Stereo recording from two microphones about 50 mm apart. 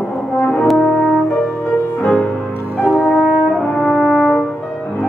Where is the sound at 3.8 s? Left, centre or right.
Centre.